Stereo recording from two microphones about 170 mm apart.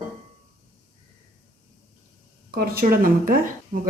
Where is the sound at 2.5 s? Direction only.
60° right (ahead or behind).